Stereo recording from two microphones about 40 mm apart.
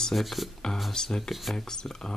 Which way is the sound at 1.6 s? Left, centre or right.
Centre.